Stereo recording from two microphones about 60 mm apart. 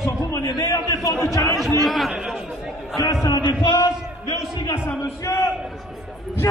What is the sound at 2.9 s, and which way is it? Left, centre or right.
Speech, left.